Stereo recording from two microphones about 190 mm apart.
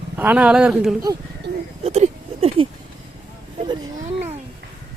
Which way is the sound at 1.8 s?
35° right (ahead or behind).